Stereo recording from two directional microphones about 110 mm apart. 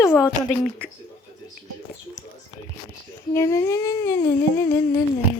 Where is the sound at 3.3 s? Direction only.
25° left (ahead or behind).